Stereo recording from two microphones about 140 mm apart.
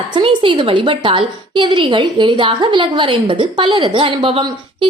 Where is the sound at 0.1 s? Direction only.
40° right (ahead or behind).